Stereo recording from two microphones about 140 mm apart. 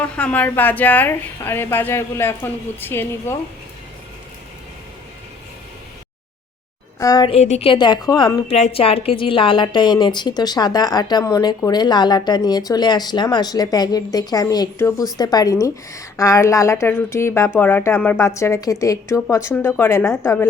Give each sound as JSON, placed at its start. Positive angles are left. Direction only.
{"t": 0.0, "sound": "a woman's voice", "side_deg": 10}
{"t": 7.0, "sound": "a woman's voice", "side_deg": 25}
{"t": 7.3, "sound": "a woman's voice", "side_deg": 50}
{"t": 8.4, "sound": "a woman's voice", "side_deg": 50}